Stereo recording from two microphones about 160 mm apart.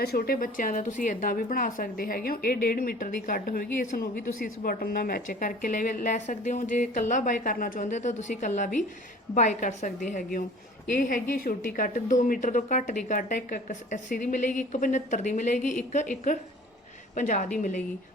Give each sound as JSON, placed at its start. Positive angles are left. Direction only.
{"t": 0.0, "sound": "a woman's voice", "side_deg": 70}
{"t": 10.9, "sound": "a woman's voice", "side_deg": 60}
{"t": 11.9, "sound": "a woman's voice", "side_deg": 50}